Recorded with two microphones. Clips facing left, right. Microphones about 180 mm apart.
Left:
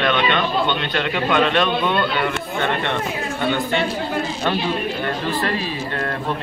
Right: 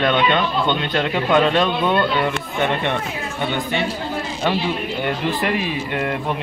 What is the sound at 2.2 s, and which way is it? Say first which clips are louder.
A man's voice: right 1 dB; 15° right (ahead or behind).